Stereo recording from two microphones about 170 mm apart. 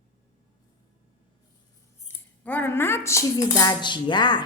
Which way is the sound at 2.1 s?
10° left (ahead or behind).